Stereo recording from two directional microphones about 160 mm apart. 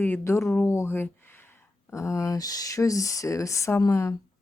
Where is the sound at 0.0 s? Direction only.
15° left (ahead or behind).